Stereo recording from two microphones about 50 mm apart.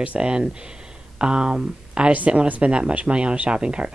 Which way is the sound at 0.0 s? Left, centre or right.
Right.